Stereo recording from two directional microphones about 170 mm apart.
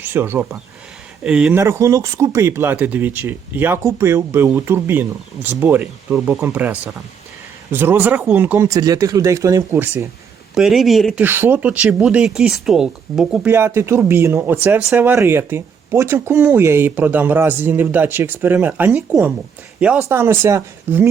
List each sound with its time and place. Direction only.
0.0 s speech: 15° right (ahead or behind)
1.6 s speech: 20° right (ahead or behind)
10.5 s speech: centre (ahead or behind)
11.2 s speech: 10° right (ahead or behind)